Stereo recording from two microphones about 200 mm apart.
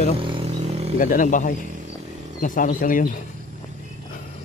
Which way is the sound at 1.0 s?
40° left (ahead or behind).